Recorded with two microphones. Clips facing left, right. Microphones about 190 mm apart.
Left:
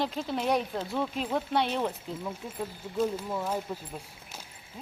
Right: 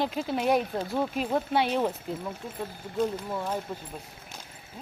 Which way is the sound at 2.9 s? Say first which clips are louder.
Right 1 dB; 5° left (ahead or behind).